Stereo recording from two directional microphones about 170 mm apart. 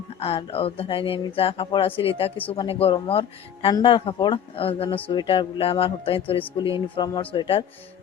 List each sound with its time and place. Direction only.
0.2 s speech: 35° left (ahead or behind)